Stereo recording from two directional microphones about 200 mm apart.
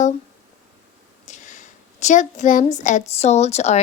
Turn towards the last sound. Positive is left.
turn(degrees=35)  # may be behind; listen again after turning